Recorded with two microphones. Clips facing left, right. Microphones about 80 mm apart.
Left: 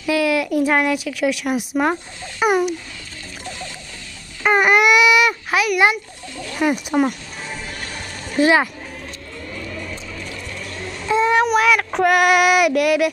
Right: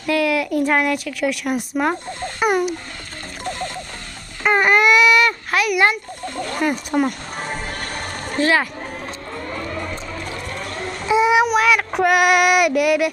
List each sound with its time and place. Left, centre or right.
0.1 s speech: centre
2.4 s a sound: centre
4.4 s baby cry: centre
6.2 s a sound: right
6.6 s speech: centre
7.1 s music: right
8.4 s speech: centre
9.5 s a sound: right
11.1 s child singing: centre